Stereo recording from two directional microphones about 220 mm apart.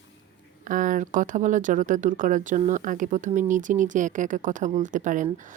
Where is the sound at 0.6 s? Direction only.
35° right (ahead or behind).